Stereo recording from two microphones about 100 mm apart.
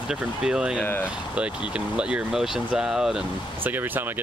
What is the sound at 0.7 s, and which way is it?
Speech, 20° left (ahead or behind).